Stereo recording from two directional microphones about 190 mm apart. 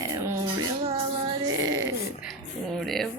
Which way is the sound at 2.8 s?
Centre (ahead or behind).